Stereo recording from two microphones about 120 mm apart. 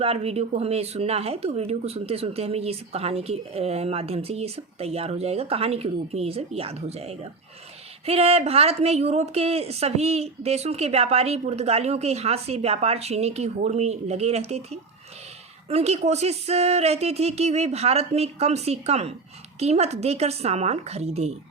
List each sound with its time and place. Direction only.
0.0 s speech: 55° right (ahead or behind)